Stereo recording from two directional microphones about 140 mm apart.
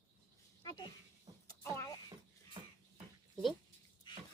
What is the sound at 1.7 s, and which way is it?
Vehicle, 25° left (ahead or behind).